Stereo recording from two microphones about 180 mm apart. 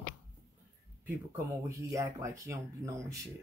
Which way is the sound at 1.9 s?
15° right (ahead or behind).